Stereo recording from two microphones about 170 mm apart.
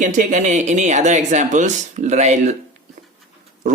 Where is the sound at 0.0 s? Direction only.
45° right (ahead or behind).